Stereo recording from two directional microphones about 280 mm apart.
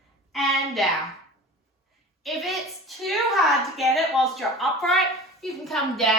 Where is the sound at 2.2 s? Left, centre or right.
Centre.